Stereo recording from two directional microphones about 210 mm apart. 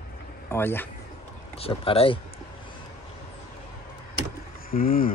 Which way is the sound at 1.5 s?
25° left (ahead or behind).